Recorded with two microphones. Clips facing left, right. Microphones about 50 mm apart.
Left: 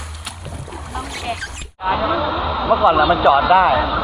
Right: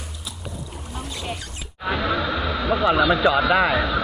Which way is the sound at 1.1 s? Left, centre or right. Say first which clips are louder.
Left 6 dB; left.